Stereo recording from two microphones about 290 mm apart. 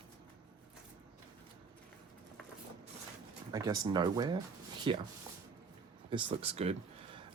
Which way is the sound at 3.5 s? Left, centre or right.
Centre.